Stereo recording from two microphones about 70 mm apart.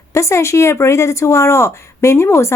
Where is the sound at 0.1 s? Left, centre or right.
Left.